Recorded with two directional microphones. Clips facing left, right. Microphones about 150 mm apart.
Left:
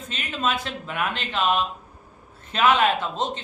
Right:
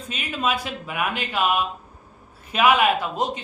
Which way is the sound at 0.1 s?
10° right (ahead or behind).